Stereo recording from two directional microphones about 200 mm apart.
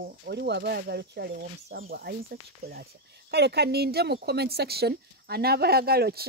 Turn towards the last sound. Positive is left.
turn(degrees=-50)  # may be behind; listen again after turning